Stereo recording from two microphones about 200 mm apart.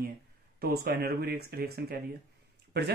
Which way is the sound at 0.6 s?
50° right (ahead or behind).